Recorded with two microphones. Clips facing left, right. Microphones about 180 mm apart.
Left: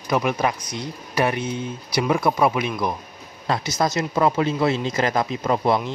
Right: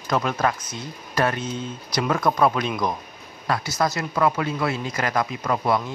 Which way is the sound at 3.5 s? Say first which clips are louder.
Left 1 dB; 20° left (ahead or behind).